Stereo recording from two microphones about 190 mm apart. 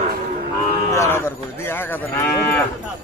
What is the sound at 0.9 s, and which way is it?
Livestock, 15° left (ahead or behind).